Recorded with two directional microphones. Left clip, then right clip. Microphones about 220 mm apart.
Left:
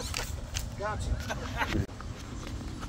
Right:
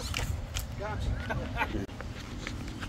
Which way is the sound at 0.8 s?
35° left (ahead or behind).